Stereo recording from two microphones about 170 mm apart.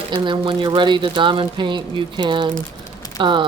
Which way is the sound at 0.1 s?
30° right (ahead or behind).